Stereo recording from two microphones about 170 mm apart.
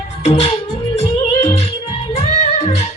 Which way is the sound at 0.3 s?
40° left (ahead or behind).